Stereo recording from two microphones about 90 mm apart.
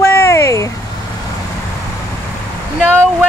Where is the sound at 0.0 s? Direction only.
30° left (ahead or behind).